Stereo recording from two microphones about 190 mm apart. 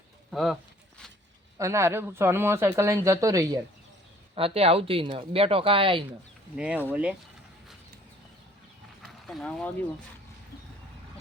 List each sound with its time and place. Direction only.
0.3 s a sound: centre (ahead or behind)
1.5 s speech: 15° right (ahead or behind)
4.4 s speech: 30° right (ahead or behind)
6.6 s speech: 5° right (ahead or behind)
9.0 s mechanisms: centre (ahead or behind)